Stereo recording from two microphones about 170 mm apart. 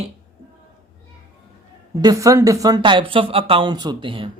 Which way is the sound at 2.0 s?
20° right (ahead or behind).